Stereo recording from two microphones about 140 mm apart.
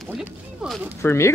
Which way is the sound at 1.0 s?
20° left (ahead or behind).